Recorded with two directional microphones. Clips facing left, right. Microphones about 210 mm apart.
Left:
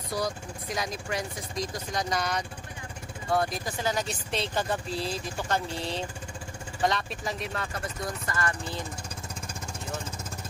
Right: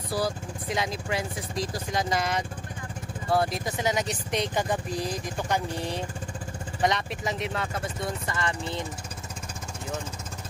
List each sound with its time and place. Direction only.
0.1 s speech: 25° right (ahead or behind)